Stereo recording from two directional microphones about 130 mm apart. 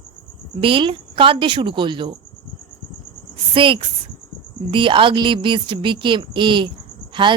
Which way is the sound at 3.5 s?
40° right (ahead or behind).